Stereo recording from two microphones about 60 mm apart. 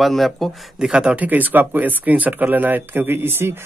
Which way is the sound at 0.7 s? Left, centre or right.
Centre.